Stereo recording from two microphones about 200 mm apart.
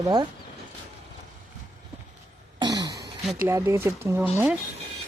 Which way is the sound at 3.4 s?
15° right (ahead or behind).